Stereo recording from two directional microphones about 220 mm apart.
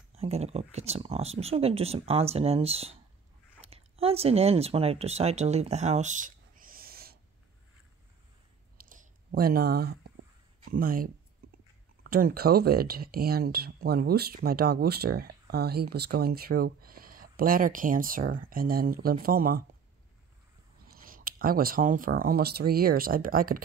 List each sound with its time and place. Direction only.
0.1 s speech: 30° right (ahead or behind)
8.8 s a sound: 40° right (ahead or behind)
10.6 s speech: 40° right (ahead or behind)
20.9 s speech: 40° right (ahead or behind)